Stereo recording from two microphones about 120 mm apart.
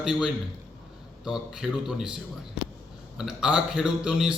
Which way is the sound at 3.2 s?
5° right (ahead or behind).